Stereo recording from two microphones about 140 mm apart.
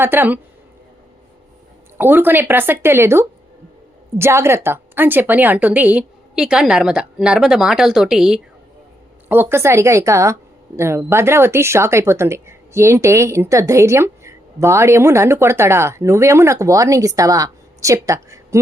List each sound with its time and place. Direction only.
0.0 s a woman's voice: 15° right (ahead or behind)
2.0 s a woman's voice: 15° right (ahead or behind)
9.3 s speech: 15° right (ahead or behind)